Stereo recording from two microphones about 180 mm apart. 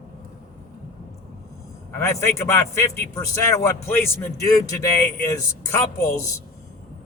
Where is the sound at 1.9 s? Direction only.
15° left (ahead or behind).